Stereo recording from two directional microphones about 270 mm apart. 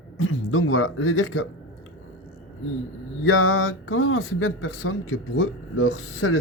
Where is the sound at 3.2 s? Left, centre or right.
Left.